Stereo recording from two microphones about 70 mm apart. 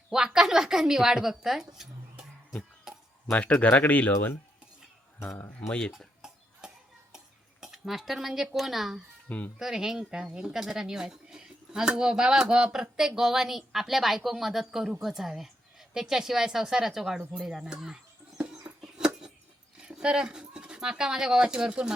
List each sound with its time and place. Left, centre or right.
0.1 s a woman's voice: centre
2.9 s a sound: centre
3.6 s speech: left
5.2 s speech: left
5.5 s speech: left
7.6 s a woman's voice: centre
18.4 s a sound: centre
19.7 s speech: centre